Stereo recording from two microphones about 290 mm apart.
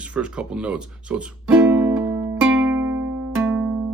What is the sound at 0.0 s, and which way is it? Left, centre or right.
Music, centre.